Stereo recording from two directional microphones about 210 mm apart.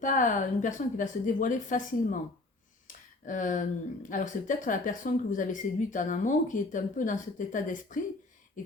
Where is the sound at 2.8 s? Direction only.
40° left (ahead or behind).